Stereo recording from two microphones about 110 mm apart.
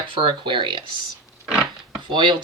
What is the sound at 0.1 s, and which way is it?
Speech, 50° right (ahead or behind).